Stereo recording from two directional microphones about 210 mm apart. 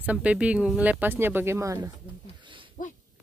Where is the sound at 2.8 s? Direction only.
40° left (ahead or behind).